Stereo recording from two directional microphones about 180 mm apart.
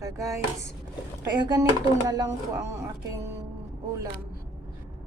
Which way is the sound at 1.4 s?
25° right (ahead or behind).